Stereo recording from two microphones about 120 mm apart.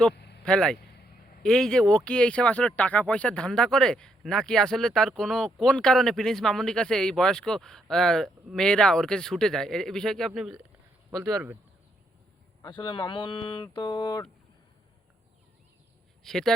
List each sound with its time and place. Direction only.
0.0 s speech: 5° left (ahead or behind)
12.6 s speech: 40° left (ahead or behind)
16.2 s speech: 5° left (ahead or behind)